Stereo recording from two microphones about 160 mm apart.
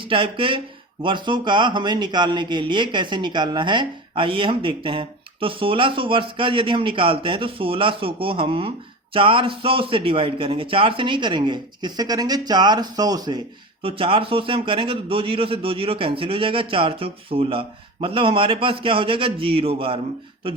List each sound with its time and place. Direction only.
0.0 s a man's voice: 35° right (ahead or behind)